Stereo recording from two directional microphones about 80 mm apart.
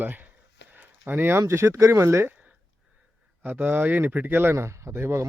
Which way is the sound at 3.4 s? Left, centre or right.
Right.